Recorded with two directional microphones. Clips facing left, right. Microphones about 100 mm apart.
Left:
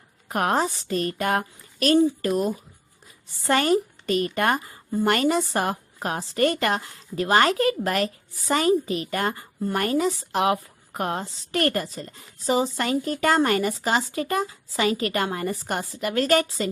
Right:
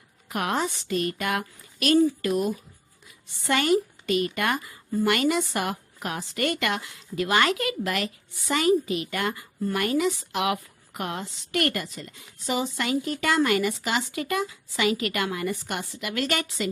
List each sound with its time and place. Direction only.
0.3 s a woman's voice: 40° left (ahead or behind)